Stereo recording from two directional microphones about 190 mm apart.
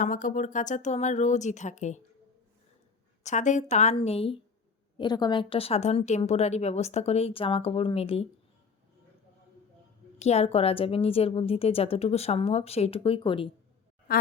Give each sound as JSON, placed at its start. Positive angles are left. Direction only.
{"t": 0.0, "sound": "a woman's voice", "side_deg": 45}
{"t": 3.2, "sound": "a woman's voice", "side_deg": 40}
{"t": 10.2, "sound": "a woman's voice", "side_deg": 35}
{"t": 14.1, "sound": "quack", "side_deg": 50}